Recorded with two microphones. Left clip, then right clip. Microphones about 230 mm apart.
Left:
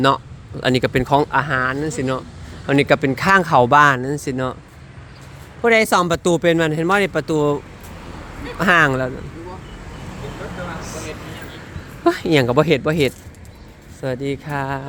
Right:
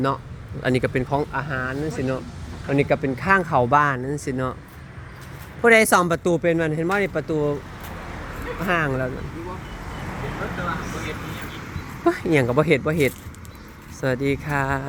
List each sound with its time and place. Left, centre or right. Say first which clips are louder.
0.6 s speech: left 4 dB; centre
1.0 s speech: left 8 dB; left; by 4.5 s centre
5.6 s speech: left 1 dB; centre; by 9.0 s left
12.0 s speech: left 4 dB; centre
14.0 s speech: right 1 dB; centre